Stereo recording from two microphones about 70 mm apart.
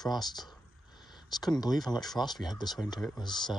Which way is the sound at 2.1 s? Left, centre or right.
Left.